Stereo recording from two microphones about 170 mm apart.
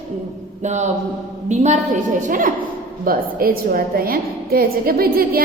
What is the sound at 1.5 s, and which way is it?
A woman's voice, 45° right (ahead or behind).